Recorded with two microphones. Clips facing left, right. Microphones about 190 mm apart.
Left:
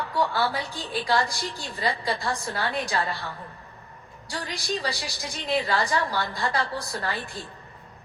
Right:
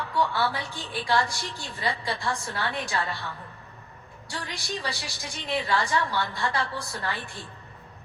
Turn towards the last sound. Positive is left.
turn(degrees=40)  # may be behind; listen again after turning